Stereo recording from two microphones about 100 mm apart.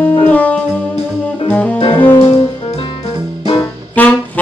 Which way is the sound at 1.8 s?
60° left (ahead or behind).